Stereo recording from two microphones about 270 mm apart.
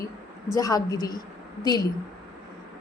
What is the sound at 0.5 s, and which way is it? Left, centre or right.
Speech, centre.